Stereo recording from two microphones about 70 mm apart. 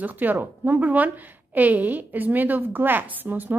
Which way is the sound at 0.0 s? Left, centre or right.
Right.